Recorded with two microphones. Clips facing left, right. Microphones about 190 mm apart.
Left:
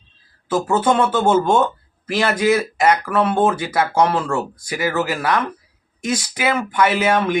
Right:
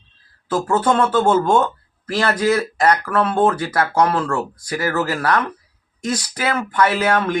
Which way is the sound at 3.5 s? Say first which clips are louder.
Even; 25° left (ahead or behind).